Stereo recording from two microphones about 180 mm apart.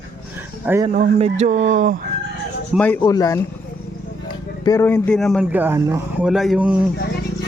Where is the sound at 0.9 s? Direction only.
40° right (ahead or behind).